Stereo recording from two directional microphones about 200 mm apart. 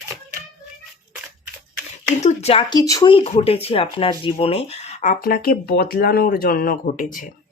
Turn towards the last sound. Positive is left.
turn(degrees=45)  # may be behind; listen again after turning